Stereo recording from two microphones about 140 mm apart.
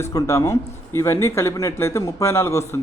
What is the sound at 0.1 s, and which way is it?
Speech, 20° left (ahead or behind).